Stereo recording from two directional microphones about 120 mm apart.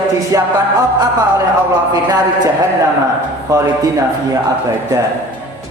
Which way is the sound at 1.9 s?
35° right (ahead or behind).